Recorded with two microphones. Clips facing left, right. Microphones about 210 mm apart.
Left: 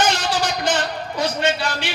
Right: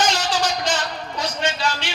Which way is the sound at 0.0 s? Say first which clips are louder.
Left 1 dB; 55° left (ahead or behind).